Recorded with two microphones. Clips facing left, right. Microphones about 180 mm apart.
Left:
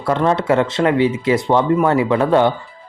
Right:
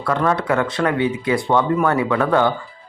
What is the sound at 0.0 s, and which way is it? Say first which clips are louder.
Speech: left 3 dB; 25° left (ahead or behind).